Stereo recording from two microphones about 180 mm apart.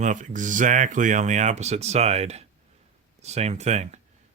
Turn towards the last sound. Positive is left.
turn(degrees=-40)  # may be behind; listen again after turning